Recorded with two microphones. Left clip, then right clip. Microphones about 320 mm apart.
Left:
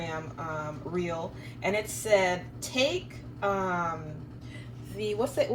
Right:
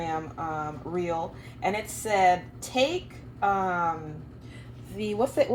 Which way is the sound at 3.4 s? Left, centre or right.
Centre.